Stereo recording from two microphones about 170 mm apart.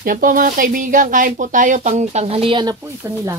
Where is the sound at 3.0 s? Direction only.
15° right (ahead or behind).